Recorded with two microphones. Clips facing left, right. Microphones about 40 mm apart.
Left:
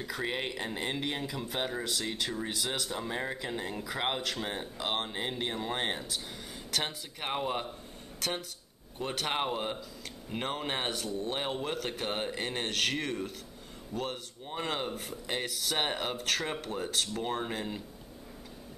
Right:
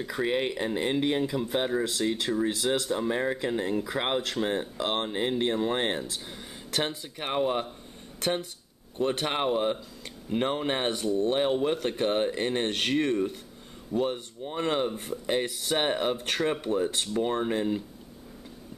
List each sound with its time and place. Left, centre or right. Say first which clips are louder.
0.0 s speech: right 6 dB; centre
9.2 s speech: right 2 dB; centre
16.2 s speech: right 5 dB; centre